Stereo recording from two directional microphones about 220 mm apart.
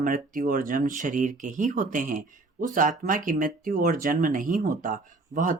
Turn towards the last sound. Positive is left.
turn(degrees=-35)  # may be behind; listen again after turning